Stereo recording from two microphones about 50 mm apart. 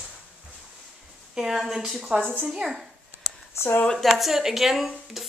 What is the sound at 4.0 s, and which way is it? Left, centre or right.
A woman's voice, centre.